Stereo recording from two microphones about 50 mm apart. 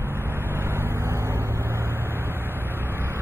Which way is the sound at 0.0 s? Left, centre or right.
Right.